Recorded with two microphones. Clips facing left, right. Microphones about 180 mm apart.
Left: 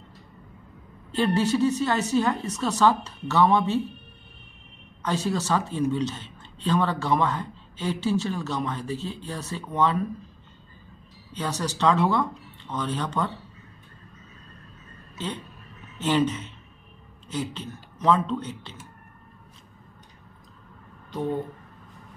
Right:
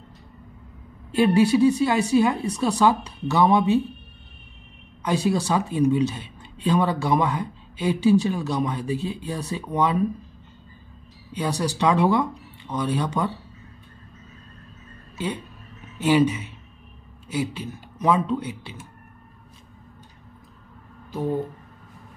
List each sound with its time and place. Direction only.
1.1 s speech: 10° right (ahead or behind)
5.0 s speech: 10° right (ahead or behind)
11.3 s speech: 10° right (ahead or behind)
15.1 s speech: 10° right (ahead or behind)
21.1 s speech: 5° right (ahead or behind)